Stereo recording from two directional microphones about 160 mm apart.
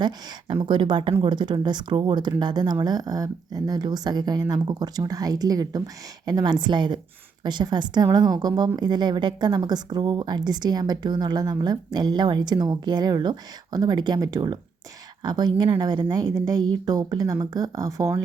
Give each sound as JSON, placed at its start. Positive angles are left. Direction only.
{"t": 0.0, "sound": "speech", "side_deg": -30}